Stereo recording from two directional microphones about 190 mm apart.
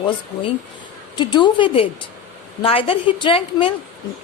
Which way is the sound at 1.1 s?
25° left (ahead or behind).